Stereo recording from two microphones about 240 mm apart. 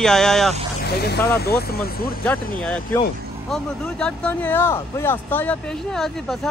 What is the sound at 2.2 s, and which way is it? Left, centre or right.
Speech, centre.